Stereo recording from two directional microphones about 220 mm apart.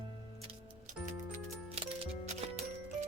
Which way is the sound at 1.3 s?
25° right (ahead or behind).